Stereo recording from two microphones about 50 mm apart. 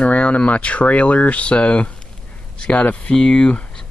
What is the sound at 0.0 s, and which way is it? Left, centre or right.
Speech, left.